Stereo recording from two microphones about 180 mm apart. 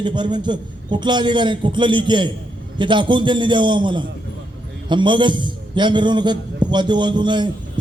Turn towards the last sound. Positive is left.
turn(degrees=-25)  # may be behind; listen again after turning